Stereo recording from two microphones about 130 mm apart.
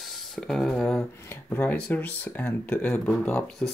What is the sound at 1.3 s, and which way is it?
Speech, 15° left (ahead or behind).